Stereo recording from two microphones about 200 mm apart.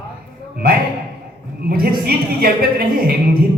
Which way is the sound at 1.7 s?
50° right (ahead or behind).